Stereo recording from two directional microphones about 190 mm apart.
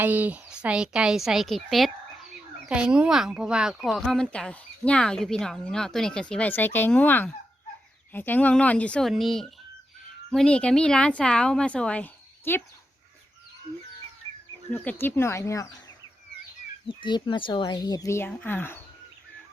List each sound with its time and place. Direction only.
0.0 s speech: 10° right (ahead or behind); by 12.6 s 10° left (ahead or behind)
14.7 s speech: 10° left (ahead or behind)
17.0 s speech: 25° left (ahead or behind)